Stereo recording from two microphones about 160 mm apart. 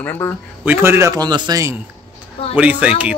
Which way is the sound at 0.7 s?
15° right (ahead or behind).